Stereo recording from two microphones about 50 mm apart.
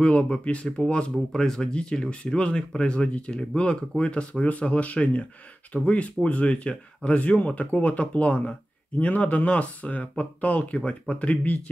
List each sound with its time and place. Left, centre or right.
0.0 s speech: centre